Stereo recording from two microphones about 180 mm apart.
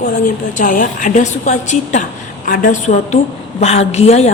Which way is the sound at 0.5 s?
45° left (ahead or behind).